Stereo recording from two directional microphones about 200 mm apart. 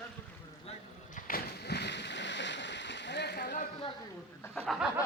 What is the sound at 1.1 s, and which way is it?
Splash, 50° left (ahead or behind).